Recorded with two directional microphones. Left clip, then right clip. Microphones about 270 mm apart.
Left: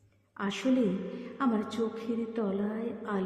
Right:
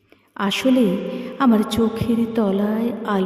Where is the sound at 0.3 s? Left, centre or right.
Right.